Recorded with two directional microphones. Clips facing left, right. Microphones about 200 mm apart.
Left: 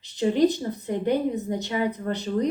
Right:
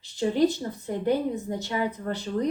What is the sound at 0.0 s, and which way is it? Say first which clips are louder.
A woman's voice: left 2 dB; 20° left (ahead or behind).